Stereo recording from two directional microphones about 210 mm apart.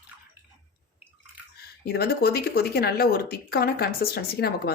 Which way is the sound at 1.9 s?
45° left (ahead or behind).